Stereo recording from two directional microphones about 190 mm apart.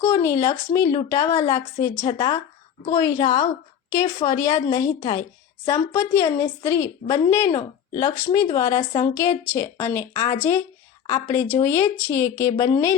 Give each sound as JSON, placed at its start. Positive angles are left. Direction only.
{"t": 0.0, "sound": "speech", "side_deg": 15}